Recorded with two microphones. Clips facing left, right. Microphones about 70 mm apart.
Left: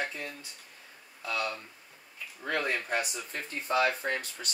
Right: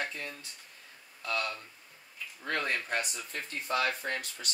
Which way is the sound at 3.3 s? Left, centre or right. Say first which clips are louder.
Left 2 dB; left.